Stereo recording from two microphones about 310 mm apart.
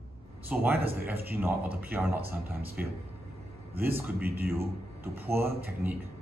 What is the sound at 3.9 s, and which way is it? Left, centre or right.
A man's voice, centre.